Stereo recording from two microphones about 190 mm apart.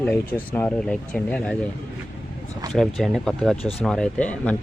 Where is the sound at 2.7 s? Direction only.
Centre (ahead or behind).